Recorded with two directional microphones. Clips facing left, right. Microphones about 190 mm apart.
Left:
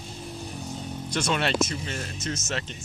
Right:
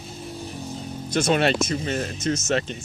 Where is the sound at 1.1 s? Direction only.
45° right (ahead or behind).